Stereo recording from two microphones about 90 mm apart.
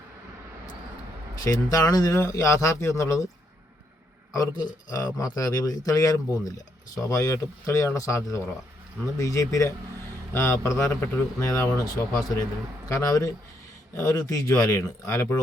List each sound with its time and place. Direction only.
1.5 s a man's voice: 40° left (ahead or behind)
4.4 s a man's voice: 40° left (ahead or behind)